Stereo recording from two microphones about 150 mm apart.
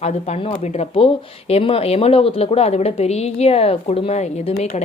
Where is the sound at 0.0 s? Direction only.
45° left (ahead or behind).